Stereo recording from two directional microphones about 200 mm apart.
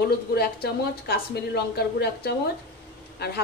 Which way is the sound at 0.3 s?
50° left (ahead or behind).